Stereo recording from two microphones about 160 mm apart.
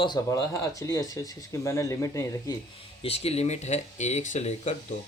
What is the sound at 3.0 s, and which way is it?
Speech, 40° left (ahead or behind).